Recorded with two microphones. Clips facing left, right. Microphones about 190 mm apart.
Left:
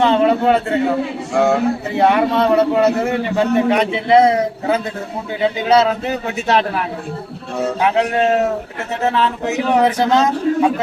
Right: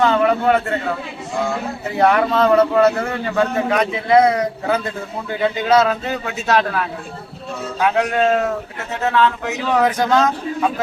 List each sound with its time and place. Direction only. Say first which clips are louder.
0.0 s a man's voice: left 2 dB; 25° left (ahead or behind)
1.3 s speech: left 7 dB; 75° left (ahead or behind)
2.0 s a man's voice: even; 20° left (ahead or behind)